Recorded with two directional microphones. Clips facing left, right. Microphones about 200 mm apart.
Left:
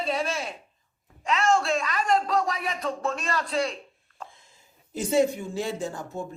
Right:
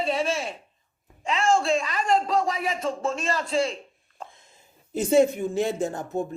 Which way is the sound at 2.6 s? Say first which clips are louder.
Right 2 dB; 25° right (ahead or behind).